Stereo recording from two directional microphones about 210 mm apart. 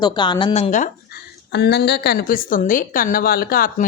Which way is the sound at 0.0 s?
20° left (ahead or behind).